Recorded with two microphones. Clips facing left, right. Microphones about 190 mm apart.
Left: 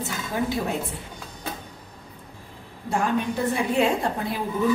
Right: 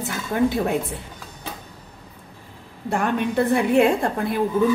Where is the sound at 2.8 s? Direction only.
60° right (ahead or behind).